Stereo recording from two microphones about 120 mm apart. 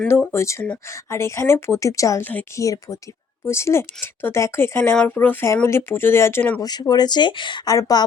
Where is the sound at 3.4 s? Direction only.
20° left (ahead or behind).